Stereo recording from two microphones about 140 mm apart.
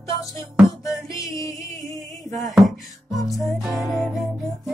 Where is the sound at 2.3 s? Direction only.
Centre (ahead or behind).